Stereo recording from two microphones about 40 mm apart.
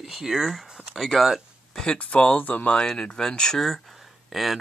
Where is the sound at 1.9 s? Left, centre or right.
Left.